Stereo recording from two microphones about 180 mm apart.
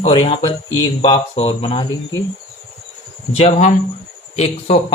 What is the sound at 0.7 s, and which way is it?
Speech, 20° left (ahead or behind).